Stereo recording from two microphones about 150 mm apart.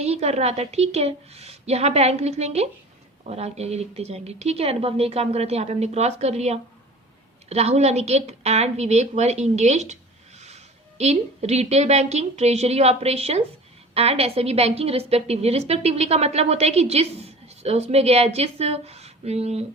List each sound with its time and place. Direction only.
0.0 s a woman's voice: 45° right (ahead or behind)